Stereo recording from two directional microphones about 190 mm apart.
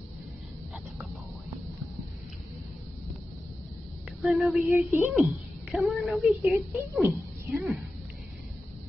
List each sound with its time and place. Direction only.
4.2 s a woman's voice: centre (ahead or behind)
4.6 s a woman's voice: 10° right (ahead or behind)
5.1 s a woman's voice: centre (ahead or behind)